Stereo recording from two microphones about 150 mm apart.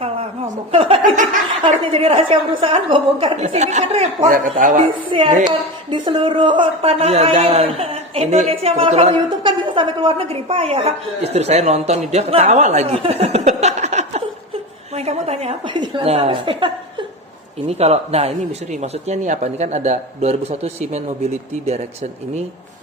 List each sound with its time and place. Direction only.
0.0 s chuckle: 40° right (ahead or behind)
1.0 s laughter: 60° right (ahead or behind)
1.8 s a woman's voice: 40° right (ahead or behind)
3.3 s speech: 50° right (ahead or behind)
5.0 s a woman's voice: 35° right (ahead or behind)
9.4 s a woman's voice: 35° right (ahead or behind)
15.7 s a woman's voice: 30° right (ahead or behind)
17.7 s speech: 45° right (ahead or behind)